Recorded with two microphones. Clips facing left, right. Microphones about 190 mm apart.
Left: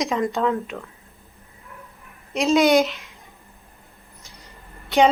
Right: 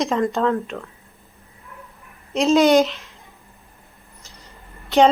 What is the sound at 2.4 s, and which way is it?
Speech, centre (ahead or behind).